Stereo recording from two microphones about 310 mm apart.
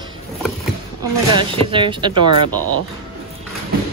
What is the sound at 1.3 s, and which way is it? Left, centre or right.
Speech, centre.